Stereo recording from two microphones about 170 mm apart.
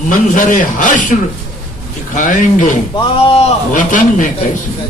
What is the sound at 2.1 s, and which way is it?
Speech, 50° left (ahead or behind).